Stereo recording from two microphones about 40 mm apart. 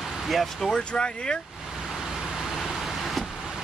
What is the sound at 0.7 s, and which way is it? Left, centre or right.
Speech, left.